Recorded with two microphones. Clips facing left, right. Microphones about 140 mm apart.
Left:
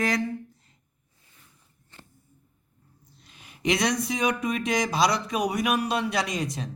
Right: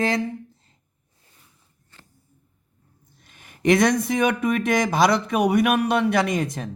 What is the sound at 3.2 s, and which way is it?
Speech, 50° right (ahead or behind).